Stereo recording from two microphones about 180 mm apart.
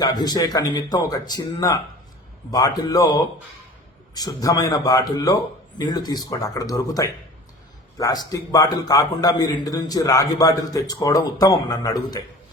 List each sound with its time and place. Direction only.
0.0 s a man's voice: 20° left (ahead or behind)